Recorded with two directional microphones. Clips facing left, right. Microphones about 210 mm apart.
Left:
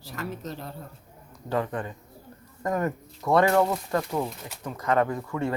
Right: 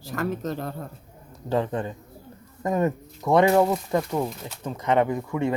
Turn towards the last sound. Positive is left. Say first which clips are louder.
# right 3 dB
turn(degrees=-15)  # may be behind; listen again after turning